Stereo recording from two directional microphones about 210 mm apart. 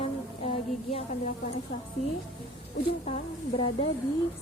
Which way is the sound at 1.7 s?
45° left (ahead or behind).